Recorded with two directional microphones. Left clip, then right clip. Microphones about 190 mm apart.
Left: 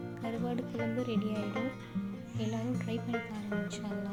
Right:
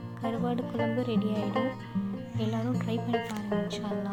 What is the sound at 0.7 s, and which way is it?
Speech, 35° right (ahead or behind).